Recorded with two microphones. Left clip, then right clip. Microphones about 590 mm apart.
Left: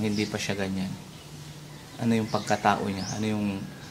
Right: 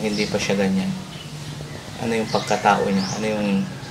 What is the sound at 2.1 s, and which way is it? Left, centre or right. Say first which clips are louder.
Speech: right 5 dB; left.